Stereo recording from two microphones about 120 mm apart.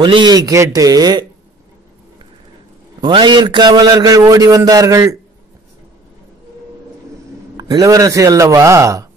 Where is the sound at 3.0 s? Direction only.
40° right (ahead or behind).